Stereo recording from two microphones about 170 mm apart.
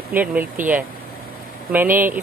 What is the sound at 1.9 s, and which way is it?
Speech, 10° right (ahead or behind).